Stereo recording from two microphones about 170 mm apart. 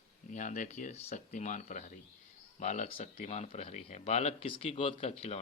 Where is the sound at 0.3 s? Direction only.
45° left (ahead or behind).